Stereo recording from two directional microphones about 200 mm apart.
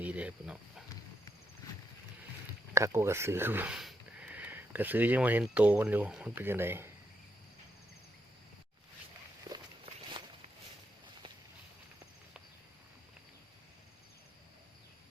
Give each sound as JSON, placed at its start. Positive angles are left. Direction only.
{"t": 0.0, "sound": "speech", "side_deg": -5}
{"t": 2.7, "sound": "speech", "side_deg": -15}
{"t": 9.5, "sound": "walk", "side_deg": -20}